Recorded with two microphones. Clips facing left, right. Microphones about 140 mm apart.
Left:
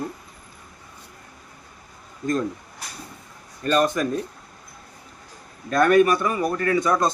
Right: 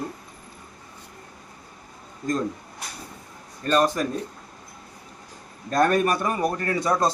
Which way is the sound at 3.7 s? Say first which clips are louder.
Even; 35° right (ahead or behind).